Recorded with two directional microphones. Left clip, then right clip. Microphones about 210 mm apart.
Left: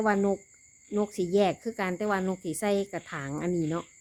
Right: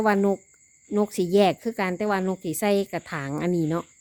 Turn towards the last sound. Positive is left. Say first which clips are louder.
# right 5 dB
turn(degrees=-30)  # may be behind; listen again after turning